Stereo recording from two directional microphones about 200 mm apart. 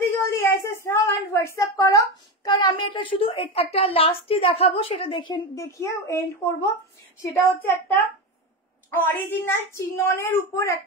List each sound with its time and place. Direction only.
0.0 s a sound: 10° left (ahead or behind); by 3.4 s 25° left (ahead or behind)
3.5 s a woman's voice: 30° left (ahead or behind)
5.3 s a woman's voice: 15° left (ahead or behind)